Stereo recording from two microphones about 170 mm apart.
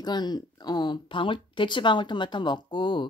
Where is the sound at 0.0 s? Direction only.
25° left (ahead or behind).